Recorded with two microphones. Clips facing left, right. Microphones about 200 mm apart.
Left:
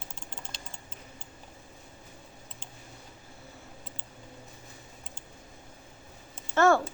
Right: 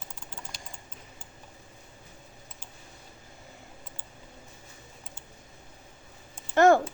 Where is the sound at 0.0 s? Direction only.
30° left (ahead or behind).